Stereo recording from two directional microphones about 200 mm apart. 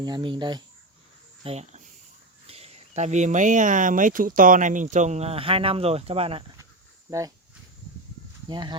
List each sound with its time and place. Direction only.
0.0 s speech: 20° right (ahead or behind)
1.5 s speech: 35° right (ahead or behind)
7.1 s speech: 15° right (ahead or behind)
8.4 s speech: 20° right (ahead or behind)